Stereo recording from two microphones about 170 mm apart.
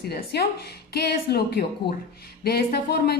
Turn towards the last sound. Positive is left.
turn(degrees=65)  # may be behind; listen again after turning